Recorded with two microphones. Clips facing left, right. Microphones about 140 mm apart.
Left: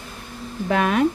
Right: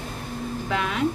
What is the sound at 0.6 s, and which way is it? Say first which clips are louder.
Speech: left 8 dB; 50° left (ahead or behind).